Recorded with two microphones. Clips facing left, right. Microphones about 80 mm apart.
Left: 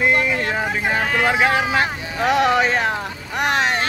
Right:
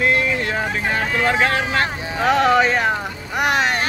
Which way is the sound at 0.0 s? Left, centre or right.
Centre.